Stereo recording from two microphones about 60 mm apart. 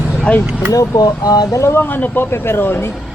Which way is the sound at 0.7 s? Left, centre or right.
Left.